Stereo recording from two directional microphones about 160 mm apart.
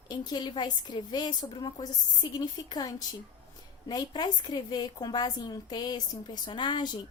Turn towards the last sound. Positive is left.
turn(degrees=30)  # may be behind; listen again after turning